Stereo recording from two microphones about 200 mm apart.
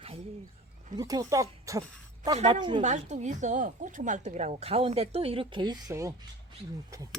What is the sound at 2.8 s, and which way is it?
A woman's voice, 35° right (ahead or behind).